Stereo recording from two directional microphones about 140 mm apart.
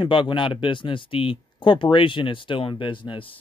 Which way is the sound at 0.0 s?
35° left (ahead or behind).